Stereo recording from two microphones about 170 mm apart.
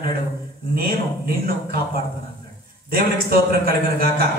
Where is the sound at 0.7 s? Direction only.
65° right (ahead or behind).